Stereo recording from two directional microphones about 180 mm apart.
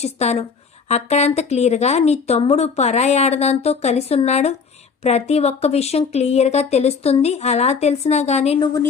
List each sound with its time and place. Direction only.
0.0 s speech: 35° left (ahead or behind)
8.5 s a woman's voice: 25° left (ahead or behind)